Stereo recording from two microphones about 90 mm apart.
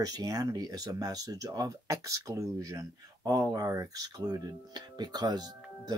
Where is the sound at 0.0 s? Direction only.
45° right (ahead or behind).